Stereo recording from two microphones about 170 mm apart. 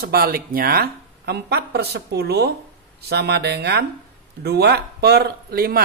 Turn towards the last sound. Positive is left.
turn(degrees=-65)  # may be behind; listen again after turning